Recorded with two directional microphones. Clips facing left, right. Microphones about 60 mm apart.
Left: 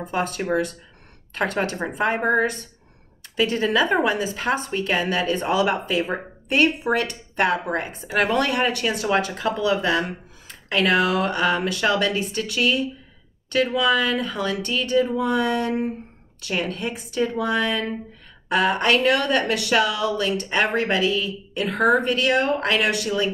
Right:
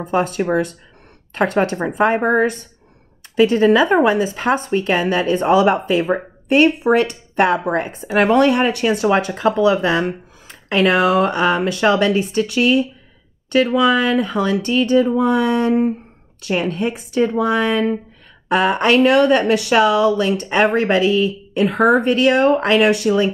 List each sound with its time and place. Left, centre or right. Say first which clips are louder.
0.1 s speech: right 6 dB; right